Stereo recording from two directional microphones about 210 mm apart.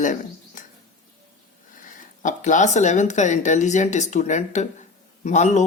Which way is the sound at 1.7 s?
40° left (ahead or behind).